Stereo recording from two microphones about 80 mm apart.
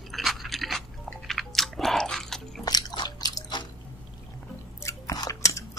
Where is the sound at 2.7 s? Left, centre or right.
Left.